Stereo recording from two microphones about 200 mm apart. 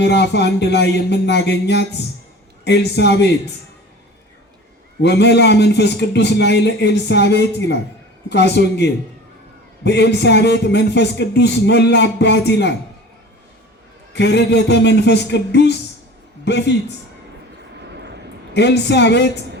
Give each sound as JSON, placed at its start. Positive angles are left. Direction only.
{"t": 0.0, "sound": "a man's voice", "side_deg": 55}
{"t": 5.0, "sound": "a man's voice", "side_deg": 55}
{"t": 14.1, "sound": "a man's voice", "side_deg": 60}
{"t": 17.9, "sound": "a sound", "side_deg": -60}
{"t": 18.5, "sound": "a man's voice", "side_deg": 60}